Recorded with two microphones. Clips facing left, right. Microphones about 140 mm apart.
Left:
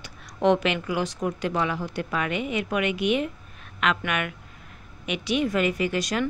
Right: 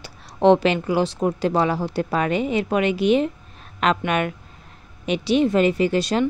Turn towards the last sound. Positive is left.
turn(degrees=-30)  # may be behind; listen again after turning